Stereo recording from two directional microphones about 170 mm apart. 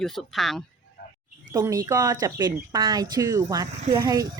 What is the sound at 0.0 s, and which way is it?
Speech, centre (ahead or behind).